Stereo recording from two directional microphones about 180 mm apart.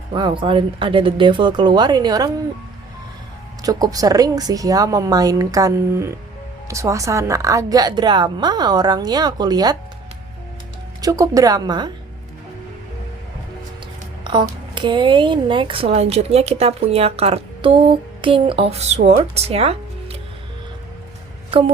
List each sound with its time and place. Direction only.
0.1 s a woman's voice: 25° right (ahead or behind)
3.6 s a woman's voice: 20° right (ahead or behind)
11.0 s a woman's voice: 20° right (ahead or behind)
14.8 s speech: 25° right (ahead or behind)